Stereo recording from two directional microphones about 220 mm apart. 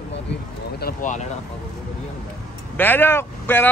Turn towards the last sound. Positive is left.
turn(degrees=10)  # may be behind; listen again after turning